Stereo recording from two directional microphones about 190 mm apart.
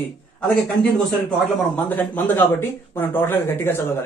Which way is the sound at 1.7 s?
10° left (ahead or behind).